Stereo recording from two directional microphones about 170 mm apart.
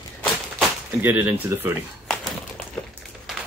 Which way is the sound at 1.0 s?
10° right (ahead or behind).